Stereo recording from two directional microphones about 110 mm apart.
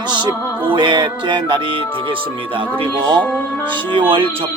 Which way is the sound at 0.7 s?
45° right (ahead or behind).